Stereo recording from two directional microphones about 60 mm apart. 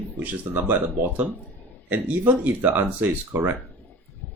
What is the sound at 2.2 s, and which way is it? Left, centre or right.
Speech, right.